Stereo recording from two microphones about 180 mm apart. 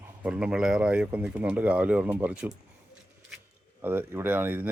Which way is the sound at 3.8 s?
10° right (ahead or behind).